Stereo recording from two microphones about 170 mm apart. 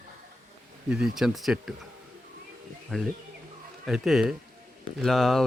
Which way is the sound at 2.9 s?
5° left (ahead or behind).